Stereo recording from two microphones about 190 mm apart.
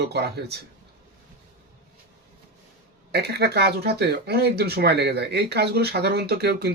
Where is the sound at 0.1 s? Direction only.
60° right (ahead or behind).